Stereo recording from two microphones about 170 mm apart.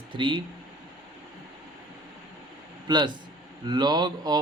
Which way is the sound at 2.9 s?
25° right (ahead or behind).